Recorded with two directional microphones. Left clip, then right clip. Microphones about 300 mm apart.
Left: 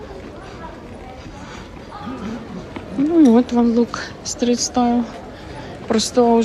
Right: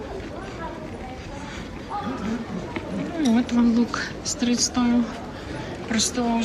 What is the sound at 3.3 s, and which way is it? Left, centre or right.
Speech, centre.